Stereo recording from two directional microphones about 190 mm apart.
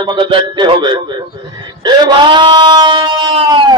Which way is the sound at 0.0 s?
25° right (ahead or behind).